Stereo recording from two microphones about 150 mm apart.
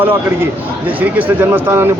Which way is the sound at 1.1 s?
10° right (ahead or behind).